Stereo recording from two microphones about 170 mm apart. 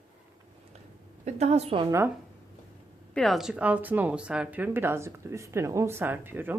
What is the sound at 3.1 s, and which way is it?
Speech, centre (ahead or behind).